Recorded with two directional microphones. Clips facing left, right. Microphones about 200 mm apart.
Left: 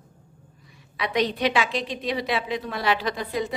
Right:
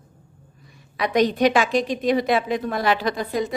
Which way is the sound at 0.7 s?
45° right (ahead or behind).